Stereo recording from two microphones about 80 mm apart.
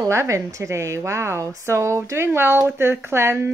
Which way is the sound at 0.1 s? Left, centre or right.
Right.